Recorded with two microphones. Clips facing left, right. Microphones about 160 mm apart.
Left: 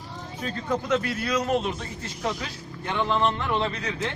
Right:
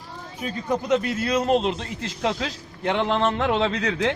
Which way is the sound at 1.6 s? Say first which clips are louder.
Right 5 dB; 85° right.